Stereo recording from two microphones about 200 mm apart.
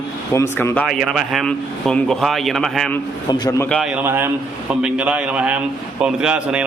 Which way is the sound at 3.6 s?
5° left (ahead or behind).